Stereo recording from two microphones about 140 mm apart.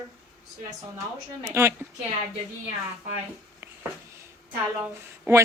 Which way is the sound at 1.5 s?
20° right (ahead or behind).